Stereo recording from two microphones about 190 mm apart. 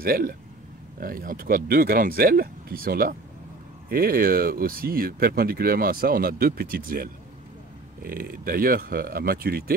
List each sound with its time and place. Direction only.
0.0 s speech: 50° right (ahead or behind)